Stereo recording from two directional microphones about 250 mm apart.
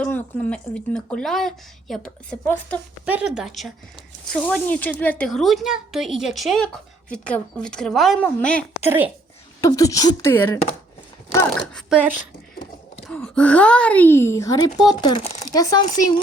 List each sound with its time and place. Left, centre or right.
0.0 s a woman's voice: centre
11.5 s a woman's voice: centre